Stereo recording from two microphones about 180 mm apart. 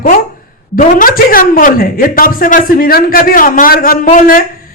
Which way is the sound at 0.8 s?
50° left (ahead or behind).